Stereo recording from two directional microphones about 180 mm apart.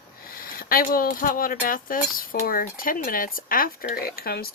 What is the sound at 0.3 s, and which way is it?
Speech, 55° left (ahead or behind).